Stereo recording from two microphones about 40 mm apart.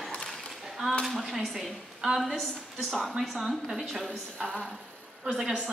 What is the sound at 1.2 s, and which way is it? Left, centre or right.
A woman's voice, centre.